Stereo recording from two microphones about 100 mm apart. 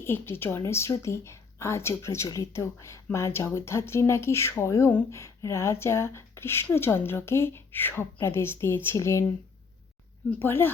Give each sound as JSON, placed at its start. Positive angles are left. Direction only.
{"t": 0.0, "sound": "speech", "side_deg": 25}
{"t": 10.2, "sound": "speech", "side_deg": 20}